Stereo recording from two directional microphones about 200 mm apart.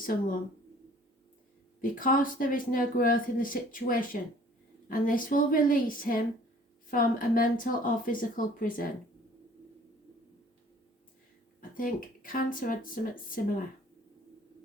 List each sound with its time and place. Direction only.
0.0 s speech: 45° left (ahead or behind)
1.8 s speech: 45° left (ahead or behind)
11.7 s speech: 45° left (ahead or behind)